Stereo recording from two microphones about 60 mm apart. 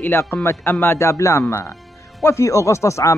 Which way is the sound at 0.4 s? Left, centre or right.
Left.